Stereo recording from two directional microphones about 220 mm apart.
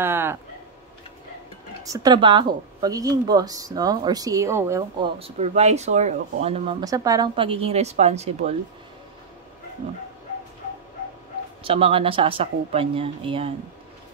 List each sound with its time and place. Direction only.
0.0 s a sound: 10° right (ahead or behind)
1.8 s a woman's voice: 15° right (ahead or behind)
5.2 s speech: 30° right (ahead or behind)
6.8 s a woman's voice: 15° right (ahead or behind)
11.6 s a woman's voice: 25° right (ahead or behind)